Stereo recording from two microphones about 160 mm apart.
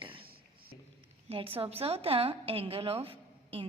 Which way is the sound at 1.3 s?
35° right (ahead or behind).